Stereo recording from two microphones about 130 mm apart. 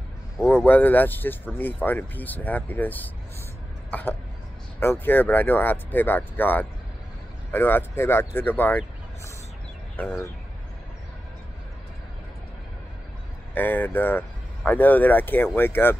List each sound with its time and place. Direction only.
0.5 s speech: 15° left (ahead or behind)
13.6 s speech: 15° left (ahead or behind)